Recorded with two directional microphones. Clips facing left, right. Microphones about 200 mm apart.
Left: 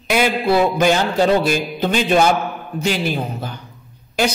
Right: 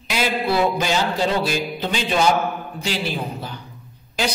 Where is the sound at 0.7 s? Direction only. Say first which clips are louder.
Left 6 dB; 55° left (ahead or behind).